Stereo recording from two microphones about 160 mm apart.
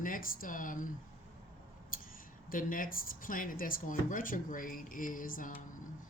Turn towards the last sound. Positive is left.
turn(degrees=55)  # may be behind; listen again after turning